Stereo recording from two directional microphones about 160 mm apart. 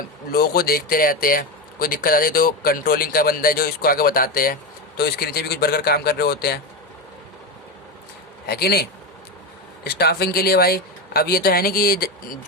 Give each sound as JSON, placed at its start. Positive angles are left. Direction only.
{"t": 0.3, "sound": "speech", "side_deg": 75}
{"t": 4.9, "sound": "a man's voice", "side_deg": 80}
{"t": 8.4, "sound": "a man's voice", "side_deg": 80}
{"t": 9.8, "sound": "speech", "side_deg": 90}